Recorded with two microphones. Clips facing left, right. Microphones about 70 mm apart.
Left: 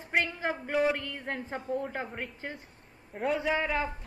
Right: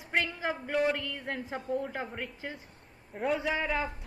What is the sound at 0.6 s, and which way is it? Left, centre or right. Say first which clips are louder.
Speech: left 1 dB; centre.